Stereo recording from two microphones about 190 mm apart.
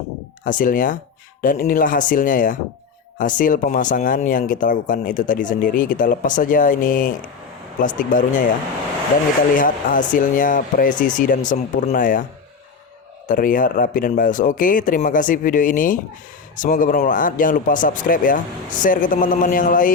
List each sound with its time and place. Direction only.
0.4 s speech: 45° left (ahead or behind)
9.6 s speech: 45° left (ahead or behind)
13.2 s speech: 45° left (ahead or behind)